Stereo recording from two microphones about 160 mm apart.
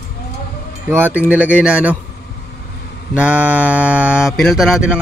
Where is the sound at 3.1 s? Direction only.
10° right (ahead or behind).